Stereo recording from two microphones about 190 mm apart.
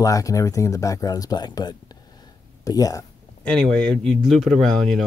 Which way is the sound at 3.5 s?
Centre (ahead or behind).